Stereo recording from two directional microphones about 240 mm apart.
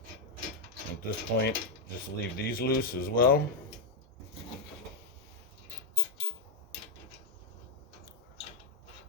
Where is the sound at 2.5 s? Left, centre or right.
Left.